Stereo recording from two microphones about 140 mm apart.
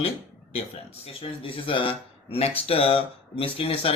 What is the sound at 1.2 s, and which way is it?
Speech, 40° left (ahead or behind).